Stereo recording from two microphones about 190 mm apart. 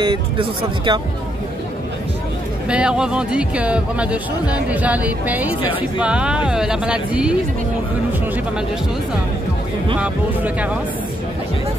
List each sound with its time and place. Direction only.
0.0 s speech: 25° right (ahead or behind)
2.7 s speech: 5° right (ahead or behind)
9.9 s speech: 5° right (ahead or behind)